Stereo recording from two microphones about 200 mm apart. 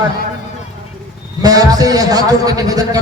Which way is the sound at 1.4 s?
20° right (ahead or behind).